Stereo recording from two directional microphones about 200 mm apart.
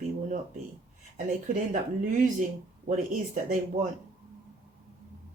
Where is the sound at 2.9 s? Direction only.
35° right (ahead or behind).